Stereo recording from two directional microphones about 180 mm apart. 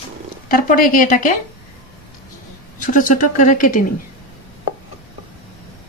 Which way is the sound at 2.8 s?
45° left (ahead or behind).